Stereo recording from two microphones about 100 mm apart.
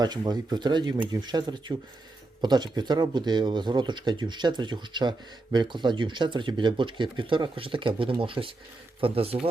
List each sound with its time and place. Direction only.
0.0 s speech: 45° right (ahead or behind); by 9.5 s 75° right (ahead or behind)